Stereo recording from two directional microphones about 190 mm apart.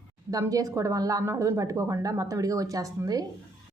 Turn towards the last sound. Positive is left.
turn(degrees=-20)  # may be behind; listen again after turning